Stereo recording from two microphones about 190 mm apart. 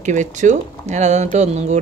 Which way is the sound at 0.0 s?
40° right (ahead or behind).